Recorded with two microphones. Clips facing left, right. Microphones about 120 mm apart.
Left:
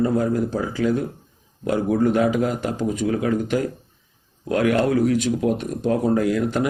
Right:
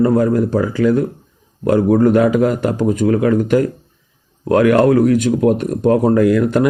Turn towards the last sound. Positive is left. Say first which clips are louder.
# right 7 dB
turn(degrees=-60)  # may be behind; listen again after turning